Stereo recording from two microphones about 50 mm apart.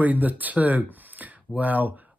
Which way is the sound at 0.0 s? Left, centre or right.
Right.